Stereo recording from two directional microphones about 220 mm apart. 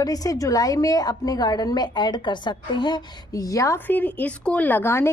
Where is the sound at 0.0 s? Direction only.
15° left (ahead or behind).